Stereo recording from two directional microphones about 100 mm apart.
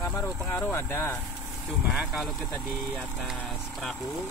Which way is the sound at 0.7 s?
25° left (ahead or behind).